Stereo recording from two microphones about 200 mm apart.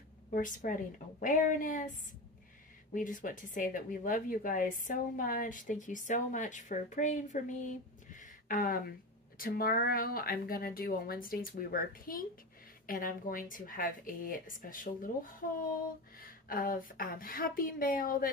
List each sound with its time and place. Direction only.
0.3 s a woman's voice: 40° left (ahead or behind)
2.9 s a woman's voice: 40° left (ahead or behind)
8.1 s a sound: 40° left (ahead or behind)
9.4 s speech: 45° left (ahead or behind)
16.2 s speech: 45° left (ahead or behind)